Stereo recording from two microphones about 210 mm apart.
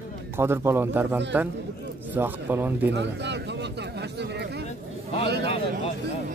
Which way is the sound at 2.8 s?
55° right (ahead or behind).